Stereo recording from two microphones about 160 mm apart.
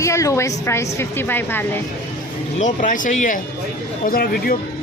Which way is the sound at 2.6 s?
55° left (ahead or behind).